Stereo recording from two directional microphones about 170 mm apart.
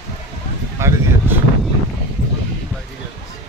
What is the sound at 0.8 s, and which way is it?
Speech, 15° right (ahead or behind).